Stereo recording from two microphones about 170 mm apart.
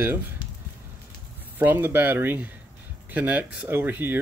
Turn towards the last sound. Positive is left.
turn(degrees=-10)  # may be behind; listen again after turning